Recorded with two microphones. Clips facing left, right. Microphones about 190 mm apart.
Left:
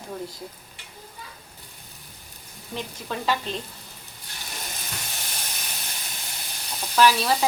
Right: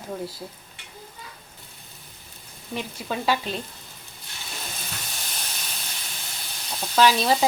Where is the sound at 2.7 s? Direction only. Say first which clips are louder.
Right 2 dB; 10° right (ahead or behind).